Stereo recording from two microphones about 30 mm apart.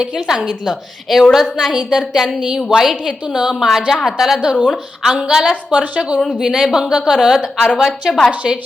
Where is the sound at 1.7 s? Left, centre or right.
Centre.